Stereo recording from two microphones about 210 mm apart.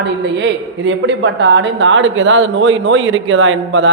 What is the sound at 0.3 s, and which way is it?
A man's voice, 60° right (ahead or behind).